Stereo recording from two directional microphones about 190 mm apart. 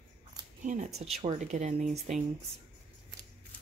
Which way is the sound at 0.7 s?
40° right (ahead or behind).